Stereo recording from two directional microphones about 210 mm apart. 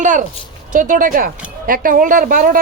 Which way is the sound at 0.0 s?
35° right (ahead or behind).